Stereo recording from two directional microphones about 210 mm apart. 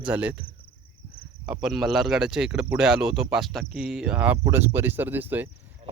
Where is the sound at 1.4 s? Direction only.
Centre (ahead or behind).